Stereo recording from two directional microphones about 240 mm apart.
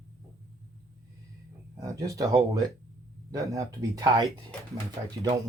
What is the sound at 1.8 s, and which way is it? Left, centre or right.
Speech, centre.